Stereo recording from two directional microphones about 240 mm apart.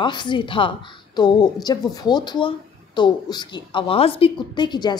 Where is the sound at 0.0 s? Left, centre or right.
Centre.